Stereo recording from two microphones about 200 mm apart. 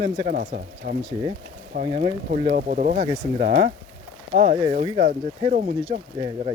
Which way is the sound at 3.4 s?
35° right (ahead or behind).